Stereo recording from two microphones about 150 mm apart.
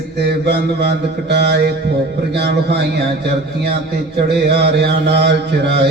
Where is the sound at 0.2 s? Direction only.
90° right.